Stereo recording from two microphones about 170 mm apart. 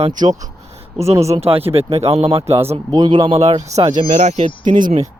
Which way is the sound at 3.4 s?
40° right (ahead or behind).